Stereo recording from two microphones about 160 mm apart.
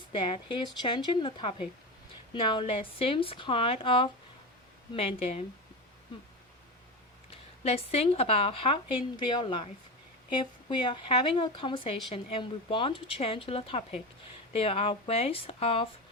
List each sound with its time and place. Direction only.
0.1 s speech: 30° left (ahead or behind)
7.3 s speech: 40° left (ahead or behind)